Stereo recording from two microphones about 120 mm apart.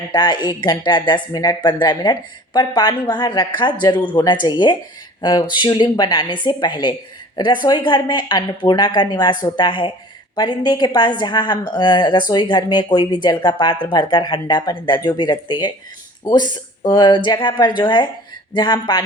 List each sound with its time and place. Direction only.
0.1 s speech: 40° left (ahead or behind)